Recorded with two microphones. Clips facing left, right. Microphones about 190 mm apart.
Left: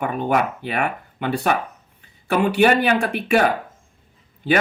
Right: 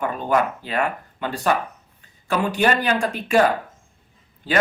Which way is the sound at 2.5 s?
60° left (ahead or behind).